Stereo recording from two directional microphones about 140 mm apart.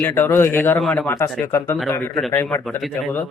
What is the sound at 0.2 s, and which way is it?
Speech, 20° left (ahead or behind).